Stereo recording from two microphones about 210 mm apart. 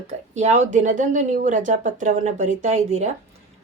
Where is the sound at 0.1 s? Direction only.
35° right (ahead or behind).